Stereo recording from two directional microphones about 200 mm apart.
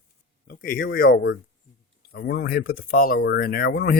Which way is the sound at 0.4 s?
45° left (ahead or behind).